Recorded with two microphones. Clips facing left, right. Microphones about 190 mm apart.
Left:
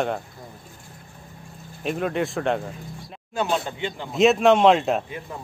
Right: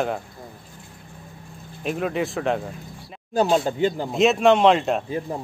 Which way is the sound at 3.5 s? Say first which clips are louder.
Right 6 dB; 40° right (ahead or behind).